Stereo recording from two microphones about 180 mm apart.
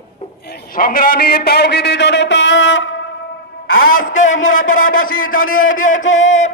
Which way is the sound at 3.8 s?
50° left (ahead or behind).